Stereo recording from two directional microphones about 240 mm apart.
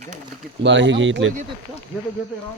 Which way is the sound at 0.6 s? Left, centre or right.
Right.